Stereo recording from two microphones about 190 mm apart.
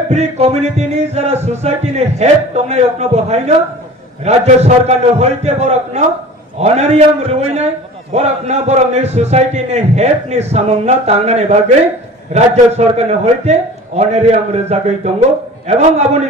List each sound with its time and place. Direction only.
0.1 s a man's voice: 35° right (ahead or behind)